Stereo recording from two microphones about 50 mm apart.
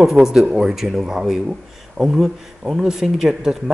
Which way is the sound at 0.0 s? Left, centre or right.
Centre.